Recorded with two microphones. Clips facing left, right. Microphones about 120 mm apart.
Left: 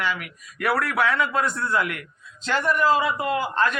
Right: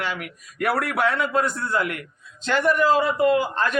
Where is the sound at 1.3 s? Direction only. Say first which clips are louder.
Right 1 dB; 40° right (ahead or behind).